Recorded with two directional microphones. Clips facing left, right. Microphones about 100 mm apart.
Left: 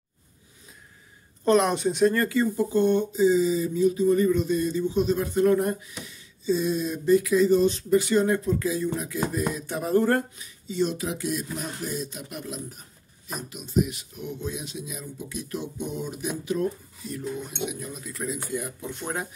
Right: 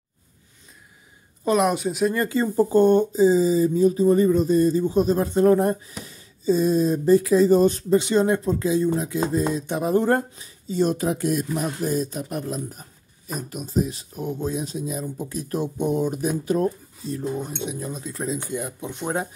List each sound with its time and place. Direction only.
1.4 s speech: 5° right (ahead or behind)
2.1 s speech: 30° right (ahead or behind)
7.9 s speech: 25° right (ahead or behind)
10.3 s speech: 35° right (ahead or behind); by 19.2 s 20° right (ahead or behind)